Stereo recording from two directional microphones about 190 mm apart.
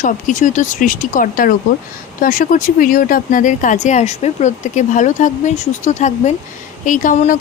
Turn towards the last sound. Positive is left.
turn(degrees=45)  # may be behind; listen again after turning